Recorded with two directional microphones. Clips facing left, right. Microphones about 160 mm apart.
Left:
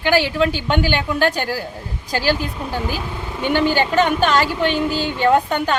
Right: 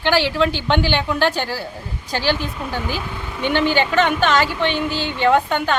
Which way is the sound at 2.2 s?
40° left (ahead or behind).